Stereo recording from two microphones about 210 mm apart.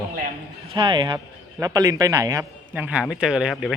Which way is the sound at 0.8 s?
20° right (ahead or behind).